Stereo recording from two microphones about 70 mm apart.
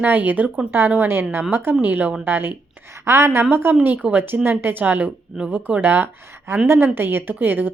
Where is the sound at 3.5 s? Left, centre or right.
Right.